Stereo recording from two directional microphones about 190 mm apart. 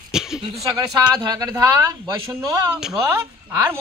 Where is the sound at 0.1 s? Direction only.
5° right (ahead or behind).